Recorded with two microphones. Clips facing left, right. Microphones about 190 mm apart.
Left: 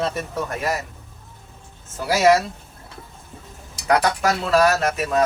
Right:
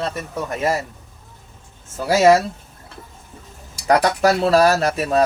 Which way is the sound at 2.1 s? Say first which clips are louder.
Right 3 dB; 30° right (ahead or behind).